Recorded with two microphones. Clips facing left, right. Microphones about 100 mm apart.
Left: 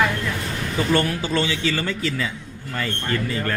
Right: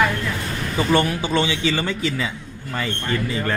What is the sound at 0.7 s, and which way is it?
A man's voice, 15° right (ahead or behind).